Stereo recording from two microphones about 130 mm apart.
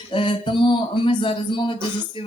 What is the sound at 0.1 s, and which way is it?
Speech, 40° left (ahead or behind).